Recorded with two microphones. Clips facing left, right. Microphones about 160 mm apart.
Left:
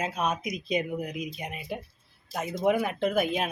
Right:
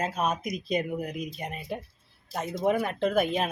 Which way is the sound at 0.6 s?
Centre (ahead or behind).